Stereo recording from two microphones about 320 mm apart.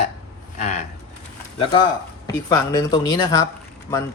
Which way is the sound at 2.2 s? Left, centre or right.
Centre.